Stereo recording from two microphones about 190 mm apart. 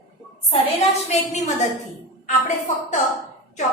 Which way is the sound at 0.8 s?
35° left (ahead or behind).